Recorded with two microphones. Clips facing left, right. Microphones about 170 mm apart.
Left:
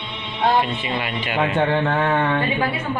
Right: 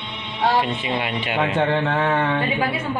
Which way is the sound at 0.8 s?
25° right (ahead or behind).